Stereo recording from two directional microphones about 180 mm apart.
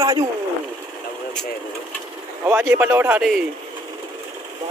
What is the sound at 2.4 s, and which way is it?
Speech, 15° right (ahead or behind).